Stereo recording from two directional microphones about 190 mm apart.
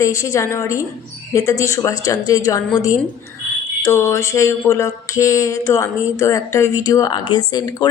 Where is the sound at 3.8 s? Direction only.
15° left (ahead or behind).